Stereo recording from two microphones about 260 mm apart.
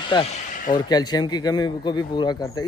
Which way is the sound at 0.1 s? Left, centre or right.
Centre.